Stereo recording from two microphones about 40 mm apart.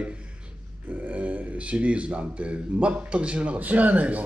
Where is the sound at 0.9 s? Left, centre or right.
Right.